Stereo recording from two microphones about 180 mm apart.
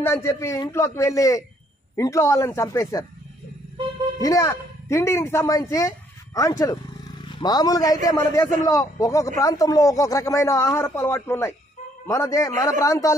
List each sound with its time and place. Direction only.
0.0 s speech: 15° left (ahead or behind)
4.2 s a man's voice: 20° left (ahead or behind)